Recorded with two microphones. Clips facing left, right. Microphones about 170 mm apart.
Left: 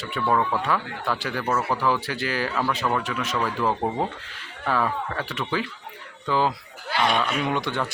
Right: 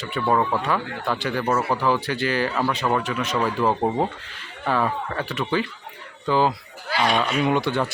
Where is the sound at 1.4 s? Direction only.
15° right (ahead or behind).